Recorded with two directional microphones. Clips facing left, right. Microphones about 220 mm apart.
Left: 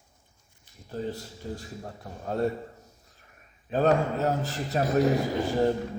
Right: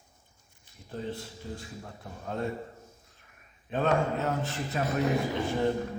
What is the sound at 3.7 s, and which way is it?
Speech, 40° left (ahead or behind).